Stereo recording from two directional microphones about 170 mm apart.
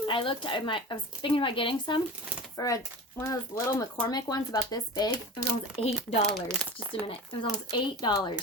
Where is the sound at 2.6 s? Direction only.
20° left (ahead or behind).